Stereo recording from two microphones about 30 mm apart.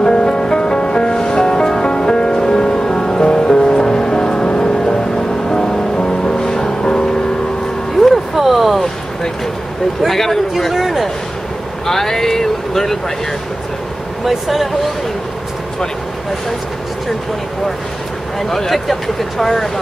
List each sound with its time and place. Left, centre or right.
0.0 s music: left
8.0 s vehicle: centre
8.4 s a sound: centre
10.0 s speech: centre
11.8 s speech: centre
14.2 s speech: centre
18.5 s speech: centre